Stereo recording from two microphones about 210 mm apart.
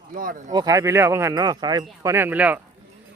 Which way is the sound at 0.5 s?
15° right (ahead or behind).